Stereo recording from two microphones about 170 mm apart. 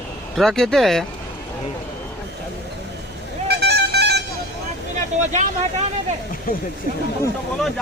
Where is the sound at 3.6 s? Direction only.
75° right (ahead or behind).